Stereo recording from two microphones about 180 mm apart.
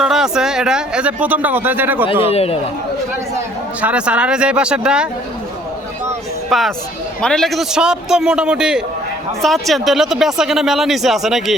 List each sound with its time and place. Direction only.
0.0 s speech: 5° right (ahead or behind)
2.2 s speech: 35° left (ahead or behind)
3.3 s speech: 10° right (ahead or behind)
6.5 s speech: centre (ahead or behind)